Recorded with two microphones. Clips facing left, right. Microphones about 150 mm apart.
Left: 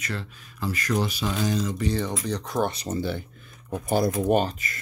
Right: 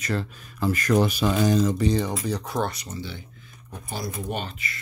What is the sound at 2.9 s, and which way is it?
Speech, 50° left (ahead or behind).